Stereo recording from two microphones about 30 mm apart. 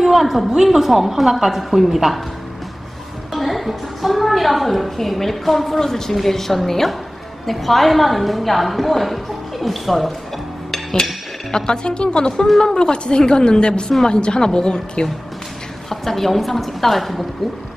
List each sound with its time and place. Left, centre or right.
0.0 s a sound: centre
0.6 s a woman's voice: centre
3.3 s a woman's voice: centre
5.8 s a woman's voice: centre
11.5 s a woman's voice: left
12.4 s a woman's voice: centre
12.7 s a woman's voice: left
15.9 s a woman's voice: centre